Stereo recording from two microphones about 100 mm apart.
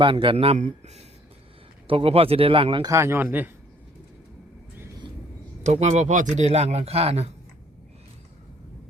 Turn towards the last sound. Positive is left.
turn(degrees=-90)